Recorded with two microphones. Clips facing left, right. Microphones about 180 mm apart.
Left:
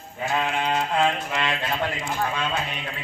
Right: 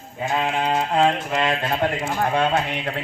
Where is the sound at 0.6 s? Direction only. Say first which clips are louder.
Right 5 dB; 30° right (ahead or behind).